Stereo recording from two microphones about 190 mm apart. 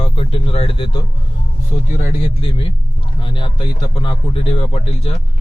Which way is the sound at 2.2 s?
25° left (ahead or behind).